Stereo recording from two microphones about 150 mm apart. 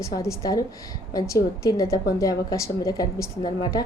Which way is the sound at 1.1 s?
20° left (ahead or behind).